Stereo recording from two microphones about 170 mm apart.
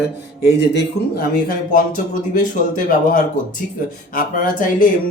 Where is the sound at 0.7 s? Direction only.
60° left (ahead or behind).